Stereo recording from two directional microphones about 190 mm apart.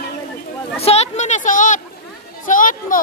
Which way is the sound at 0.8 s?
35° left (ahead or behind).